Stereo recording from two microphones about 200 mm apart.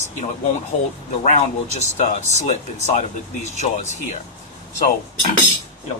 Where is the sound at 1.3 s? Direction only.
35° left (ahead or behind).